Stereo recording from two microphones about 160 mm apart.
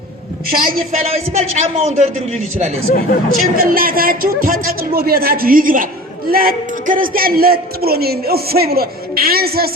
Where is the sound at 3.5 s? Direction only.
65° right (ahead or behind).